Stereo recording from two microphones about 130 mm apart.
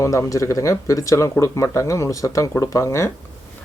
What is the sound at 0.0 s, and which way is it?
Speech, 25° left (ahead or behind).